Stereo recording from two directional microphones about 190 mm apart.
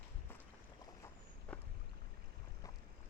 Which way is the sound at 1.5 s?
5° left (ahead or behind).